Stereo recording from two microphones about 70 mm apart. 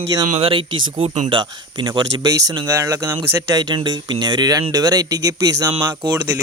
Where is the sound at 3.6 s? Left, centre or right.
Right.